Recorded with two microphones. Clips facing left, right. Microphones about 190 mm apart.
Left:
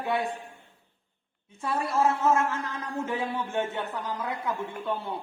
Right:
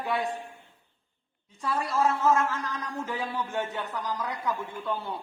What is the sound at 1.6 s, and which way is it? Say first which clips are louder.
A man's voice: left 1 dB; 25° left (ahead or behind).